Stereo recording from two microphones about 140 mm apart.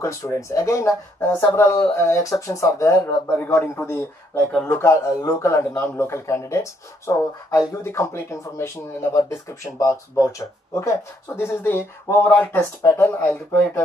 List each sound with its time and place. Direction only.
0.0 s a man's voice: 20° left (ahead or behind)